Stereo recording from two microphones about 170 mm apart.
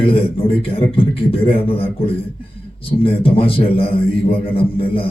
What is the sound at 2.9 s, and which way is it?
A man's voice, 35° left (ahead or behind).